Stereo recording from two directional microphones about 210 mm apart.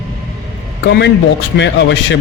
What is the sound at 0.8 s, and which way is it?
A man's voice, 55° left (ahead or behind).